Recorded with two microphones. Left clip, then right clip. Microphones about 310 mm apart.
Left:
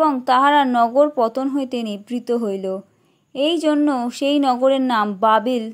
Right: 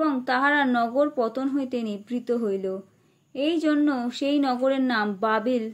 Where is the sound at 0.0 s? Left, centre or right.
Left.